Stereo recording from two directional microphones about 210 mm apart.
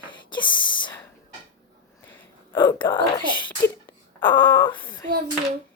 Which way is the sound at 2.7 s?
20° left (ahead or behind).